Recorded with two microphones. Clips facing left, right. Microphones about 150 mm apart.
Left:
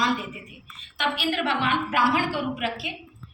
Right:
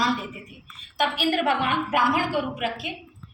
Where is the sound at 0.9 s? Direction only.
45° right (ahead or behind).